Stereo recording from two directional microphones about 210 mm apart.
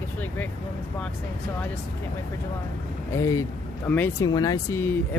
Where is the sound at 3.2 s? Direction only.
15° left (ahead or behind).